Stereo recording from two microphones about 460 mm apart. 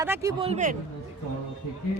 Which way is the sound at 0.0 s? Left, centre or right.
Centre.